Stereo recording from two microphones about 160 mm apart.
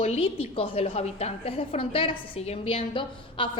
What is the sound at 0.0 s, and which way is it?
A woman's voice, 40° left (ahead or behind).